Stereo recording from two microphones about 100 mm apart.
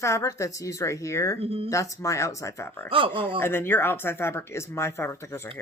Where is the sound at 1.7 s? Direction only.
30° left (ahead or behind).